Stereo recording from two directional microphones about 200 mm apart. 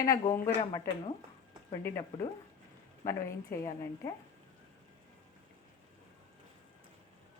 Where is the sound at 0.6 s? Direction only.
30° left (ahead or behind).